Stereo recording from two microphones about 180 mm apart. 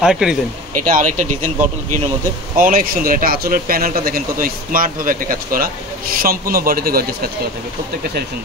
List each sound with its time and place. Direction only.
0.0 s speech: 5° right (ahead or behind)
0.8 s speech: 45° right (ahead or behind)
2.5 s speech: 50° right (ahead or behind)